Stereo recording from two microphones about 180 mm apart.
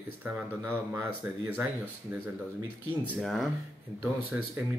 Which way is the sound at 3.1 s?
Centre (ahead or behind).